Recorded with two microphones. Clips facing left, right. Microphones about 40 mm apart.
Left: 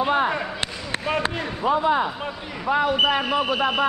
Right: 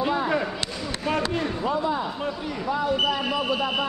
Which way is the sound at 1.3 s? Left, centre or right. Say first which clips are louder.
Right 1 dB; centre.